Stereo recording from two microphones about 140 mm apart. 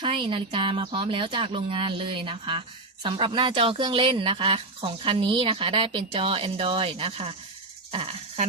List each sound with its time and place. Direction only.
0.0 s speech: 35° right (ahead or behind)